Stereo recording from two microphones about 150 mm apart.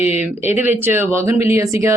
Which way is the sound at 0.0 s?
10° right (ahead or behind).